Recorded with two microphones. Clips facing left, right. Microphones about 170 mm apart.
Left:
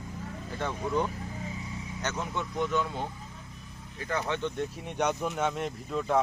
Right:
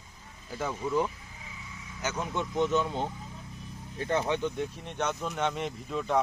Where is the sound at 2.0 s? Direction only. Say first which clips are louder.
Right 1 dB; 10° right (ahead or behind).